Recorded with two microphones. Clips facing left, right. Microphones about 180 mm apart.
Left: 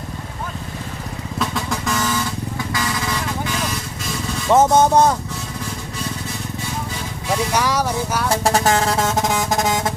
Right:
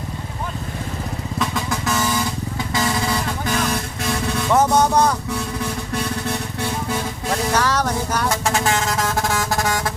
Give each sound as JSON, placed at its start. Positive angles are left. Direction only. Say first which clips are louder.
{"t": 1.4, "sound": "vehicle", "louder": "left 1 dB", "side_deg": 0}
{"t": 3.4, "sound": "vehicle", "louder": "right 3 dB", "side_deg": -55}
{"t": 4.5, "sound": "speech", "louder": "left 3 dB", "side_deg": 25}
{"t": 7.5, "sound": "a sound", "louder": "right 1 dB", "side_deg": 10}
{"t": 8.4, "sound": "vehicle", "louder": "left 6 dB", "side_deg": 40}